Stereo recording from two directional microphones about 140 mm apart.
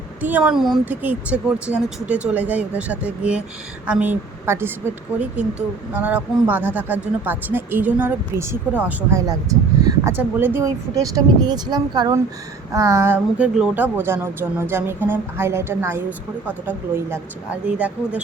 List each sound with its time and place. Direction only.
0.2 s speech: 10° right (ahead or behind)
11.0 s speech: 25° right (ahead or behind); by 18.2 s 10° right (ahead or behind)